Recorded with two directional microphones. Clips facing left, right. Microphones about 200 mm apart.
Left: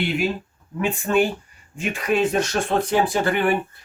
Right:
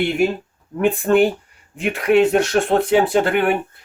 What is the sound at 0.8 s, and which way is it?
Speech, 55° right (ahead or behind).